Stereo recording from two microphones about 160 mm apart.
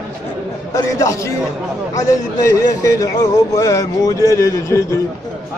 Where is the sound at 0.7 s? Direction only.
20° left (ahead or behind).